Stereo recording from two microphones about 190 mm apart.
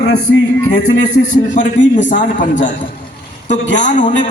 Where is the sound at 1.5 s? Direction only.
45° left (ahead or behind).